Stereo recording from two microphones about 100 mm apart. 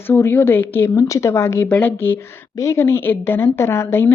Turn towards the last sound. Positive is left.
turn(degrees=25)  # may be behind; listen again after turning